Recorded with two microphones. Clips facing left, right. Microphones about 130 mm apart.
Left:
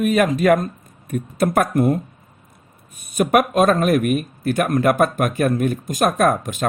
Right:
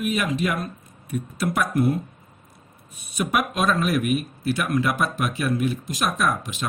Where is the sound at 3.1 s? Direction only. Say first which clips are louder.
Left 8 dB; 50° left (ahead or behind).